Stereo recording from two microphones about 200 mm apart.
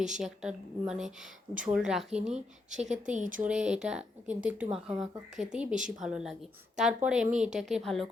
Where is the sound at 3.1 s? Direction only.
40° right (ahead or behind).